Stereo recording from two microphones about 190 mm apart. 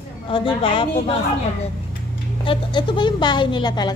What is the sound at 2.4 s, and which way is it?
A woman's voice, 25° left (ahead or behind).